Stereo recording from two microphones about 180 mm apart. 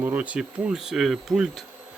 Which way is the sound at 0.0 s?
10° right (ahead or behind).